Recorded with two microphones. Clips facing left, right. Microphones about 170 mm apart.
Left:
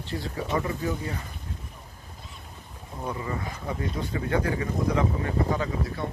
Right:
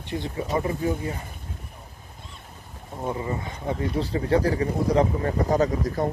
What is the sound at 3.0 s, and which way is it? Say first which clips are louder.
Speech: right 3 dB; 25° right (ahead or behind).